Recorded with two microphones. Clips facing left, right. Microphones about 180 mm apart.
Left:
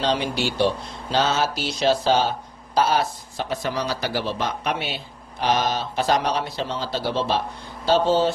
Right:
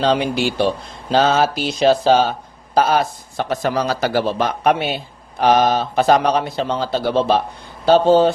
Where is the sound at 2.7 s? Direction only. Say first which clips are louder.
Right 4 dB; 55° right (ahead or behind).